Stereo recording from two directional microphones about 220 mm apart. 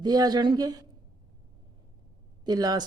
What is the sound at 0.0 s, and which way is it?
Speech, 20° right (ahead or behind).